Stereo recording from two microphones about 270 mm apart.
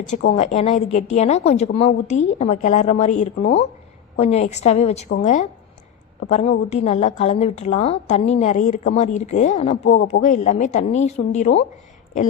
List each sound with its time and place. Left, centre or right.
0.1 s a woman's voice: left